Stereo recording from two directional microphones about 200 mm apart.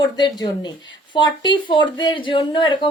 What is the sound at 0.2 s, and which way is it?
A woman's voice, 20° left (ahead or behind).